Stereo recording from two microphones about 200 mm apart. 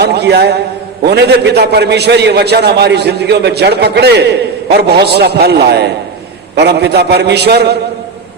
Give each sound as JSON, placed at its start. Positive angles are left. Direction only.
{"t": 0.0, "sound": "a man's voice", "side_deg": -55}